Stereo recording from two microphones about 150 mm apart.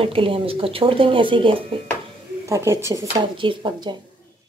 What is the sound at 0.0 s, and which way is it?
Speech, 35° right (ahead or behind).